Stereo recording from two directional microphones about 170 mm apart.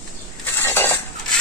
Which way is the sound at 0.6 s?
10° left (ahead or behind).